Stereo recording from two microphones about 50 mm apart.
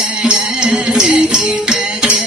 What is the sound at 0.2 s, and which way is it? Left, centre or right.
Music, centre.